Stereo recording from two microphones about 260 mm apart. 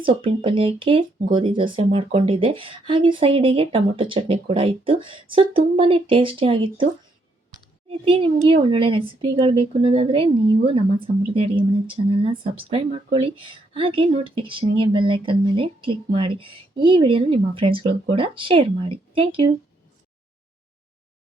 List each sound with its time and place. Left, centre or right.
0.0 s speech: centre
7.9 s speech: centre